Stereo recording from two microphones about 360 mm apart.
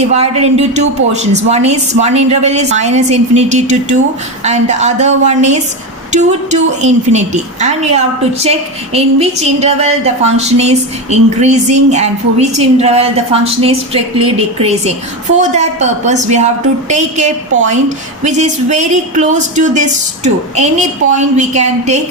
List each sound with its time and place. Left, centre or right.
0.1 s a woman's voice: centre